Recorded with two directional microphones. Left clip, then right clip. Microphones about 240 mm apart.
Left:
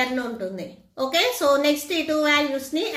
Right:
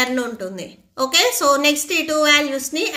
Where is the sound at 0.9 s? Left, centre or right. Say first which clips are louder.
Right 5 dB; right.